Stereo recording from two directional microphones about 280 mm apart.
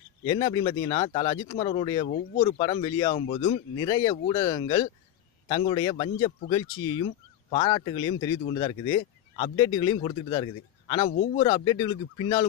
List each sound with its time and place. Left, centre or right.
0.2 s speech: centre